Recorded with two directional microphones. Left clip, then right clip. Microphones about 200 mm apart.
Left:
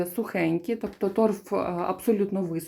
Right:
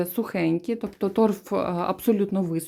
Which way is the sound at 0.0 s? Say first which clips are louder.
Right 1 dB; 30° right (ahead or behind).